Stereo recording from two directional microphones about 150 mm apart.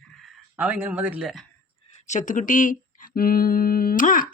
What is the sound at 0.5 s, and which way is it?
Speech, 10° right (ahead or behind).